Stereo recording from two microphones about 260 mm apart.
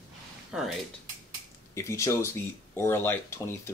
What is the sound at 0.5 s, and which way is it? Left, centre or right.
Speech, centre.